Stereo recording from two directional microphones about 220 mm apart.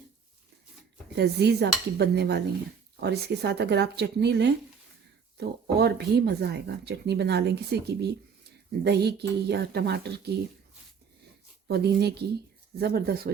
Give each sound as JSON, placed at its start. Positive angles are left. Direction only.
{"t": 1.1, "sound": "speech", "side_deg": -50}
{"t": 11.7, "sound": "speech", "side_deg": -50}